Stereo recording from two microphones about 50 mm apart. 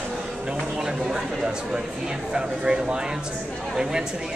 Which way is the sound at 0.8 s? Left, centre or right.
Centre.